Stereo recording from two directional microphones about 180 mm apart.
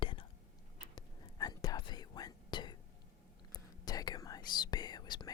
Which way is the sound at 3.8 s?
20° left (ahead or behind).